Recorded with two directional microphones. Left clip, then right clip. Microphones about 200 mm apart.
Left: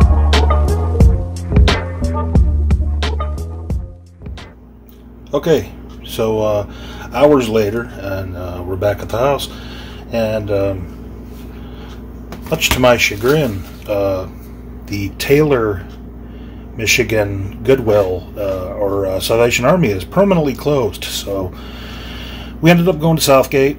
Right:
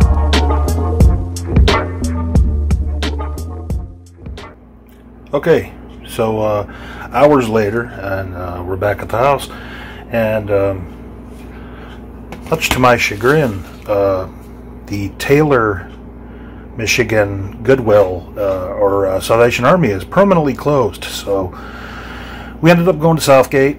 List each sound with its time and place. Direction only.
0.0 s music: centre (ahead or behind)
5.3 s a man's voice: 5° left (ahead or behind)
12.4 s a man's voice: centre (ahead or behind)
16.7 s a man's voice: centre (ahead or behind)
22.6 s a man's voice: centre (ahead or behind)